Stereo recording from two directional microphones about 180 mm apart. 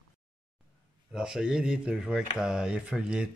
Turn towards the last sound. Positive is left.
turn(degrees=-5)  # may be behind; listen again after turning